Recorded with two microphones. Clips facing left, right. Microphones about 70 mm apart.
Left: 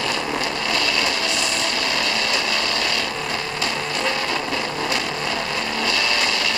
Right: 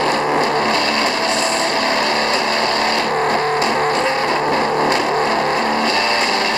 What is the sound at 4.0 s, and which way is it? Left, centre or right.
Vehicle, right.